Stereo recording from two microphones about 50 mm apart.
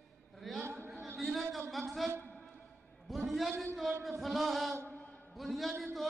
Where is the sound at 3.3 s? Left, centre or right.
Centre.